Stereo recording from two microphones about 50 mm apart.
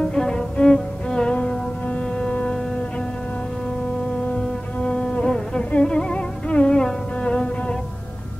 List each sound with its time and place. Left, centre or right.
0.1 s music: centre
4.8 s insect: left
5.9 s music: centre